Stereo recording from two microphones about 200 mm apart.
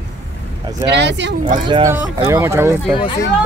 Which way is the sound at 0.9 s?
60° right (ahead or behind).